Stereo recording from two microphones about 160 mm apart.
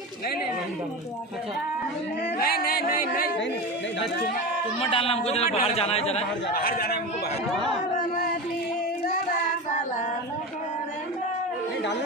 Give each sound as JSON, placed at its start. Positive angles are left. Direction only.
{"t": 2.3, "sound": "speech", "side_deg": 70}
{"t": 4.7, "sound": "a man's voice", "side_deg": 35}
{"t": 6.5, "sound": "speech", "side_deg": 70}